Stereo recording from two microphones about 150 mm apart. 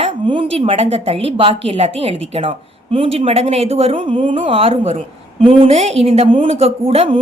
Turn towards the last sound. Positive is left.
turn(degrees=-40)  # may be behind; listen again after turning